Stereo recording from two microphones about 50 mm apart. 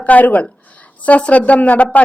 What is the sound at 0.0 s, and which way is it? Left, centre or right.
A woman's voice, left.